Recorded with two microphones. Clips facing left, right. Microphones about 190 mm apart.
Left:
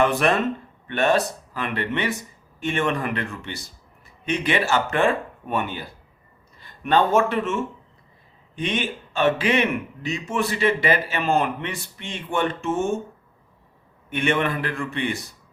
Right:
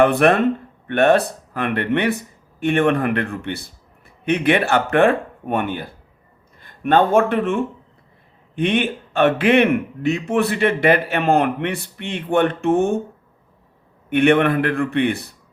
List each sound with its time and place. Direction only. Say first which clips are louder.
0.0 s a man's voice: right 6 dB; 60° right (ahead or behind)
14.1 s a man's voice: right 8 dB; 60° right (ahead or behind)